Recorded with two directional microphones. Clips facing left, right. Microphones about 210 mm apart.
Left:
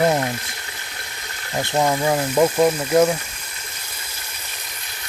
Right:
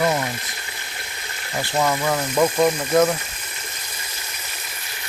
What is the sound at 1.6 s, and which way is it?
Speech, 20° left (ahead or behind).